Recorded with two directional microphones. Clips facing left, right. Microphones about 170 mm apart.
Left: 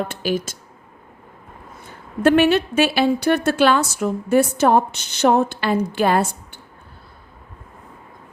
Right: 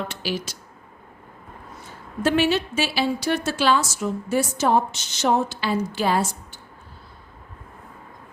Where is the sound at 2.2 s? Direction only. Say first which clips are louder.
Left 6 dB; 60° left (ahead or behind).